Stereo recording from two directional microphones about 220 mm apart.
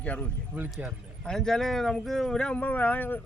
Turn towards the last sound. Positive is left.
turn(degrees=10)  # may be behind; listen again after turning